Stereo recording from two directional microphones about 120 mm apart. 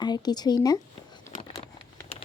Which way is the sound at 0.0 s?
35° left (ahead or behind).